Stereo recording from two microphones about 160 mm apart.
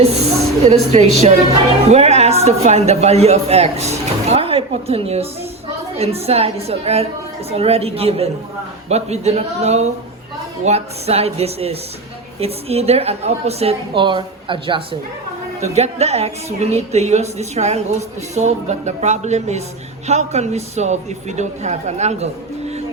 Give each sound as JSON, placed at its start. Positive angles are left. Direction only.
{"t": 0.6, "sound": "a woman's voice", "side_deg": -45}
{"t": 15.6, "sound": "a woman's voice", "side_deg": -45}